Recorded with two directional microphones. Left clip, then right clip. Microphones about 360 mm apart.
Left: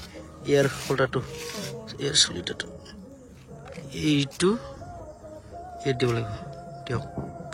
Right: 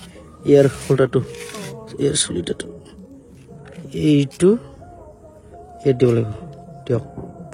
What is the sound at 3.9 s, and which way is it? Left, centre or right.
Speech, centre.